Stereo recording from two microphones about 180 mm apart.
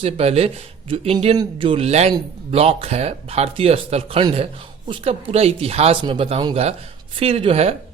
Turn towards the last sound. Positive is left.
turn(degrees=-35)  # may be behind; listen again after turning